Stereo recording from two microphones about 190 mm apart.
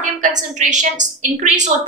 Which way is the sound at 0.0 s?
40° right (ahead or behind).